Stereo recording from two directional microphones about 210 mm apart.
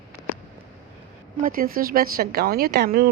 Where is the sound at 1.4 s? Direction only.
40° right (ahead or behind).